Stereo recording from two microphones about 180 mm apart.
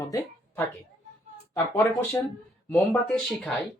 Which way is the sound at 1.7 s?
10° left (ahead or behind).